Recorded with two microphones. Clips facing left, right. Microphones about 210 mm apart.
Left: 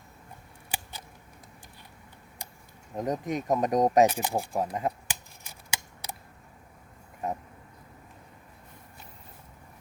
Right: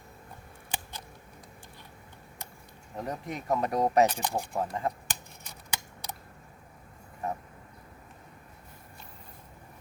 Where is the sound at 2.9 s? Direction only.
20° left (ahead or behind).